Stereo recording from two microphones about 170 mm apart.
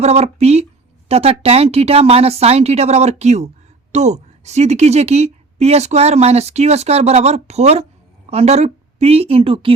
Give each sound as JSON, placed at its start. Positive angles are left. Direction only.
{"t": 0.0, "sound": "a woman's voice", "side_deg": -40}